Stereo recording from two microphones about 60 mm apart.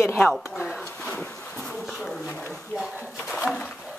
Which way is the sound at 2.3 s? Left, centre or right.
Left.